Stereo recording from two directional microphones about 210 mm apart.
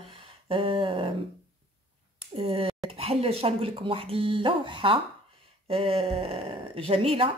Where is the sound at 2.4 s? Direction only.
25° right (ahead or behind).